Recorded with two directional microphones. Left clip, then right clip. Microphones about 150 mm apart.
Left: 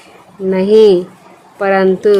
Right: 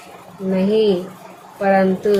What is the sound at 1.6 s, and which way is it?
Speech, 90° left.